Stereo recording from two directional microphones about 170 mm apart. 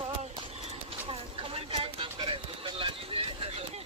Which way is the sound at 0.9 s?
30° right (ahead or behind).